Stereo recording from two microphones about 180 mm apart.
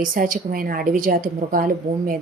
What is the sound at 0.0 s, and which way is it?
A woman's voice, 50° right (ahead or behind).